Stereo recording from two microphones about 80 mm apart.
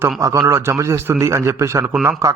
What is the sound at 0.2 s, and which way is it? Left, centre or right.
A man's voice, right.